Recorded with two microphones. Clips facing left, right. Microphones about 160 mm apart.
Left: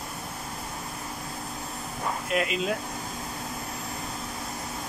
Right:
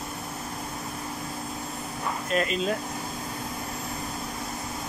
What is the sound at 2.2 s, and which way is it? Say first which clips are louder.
Speech: right 2 dB; 5° left (ahead or behind).